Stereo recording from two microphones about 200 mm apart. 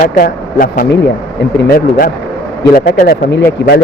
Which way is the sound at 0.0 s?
45° left (ahead or behind).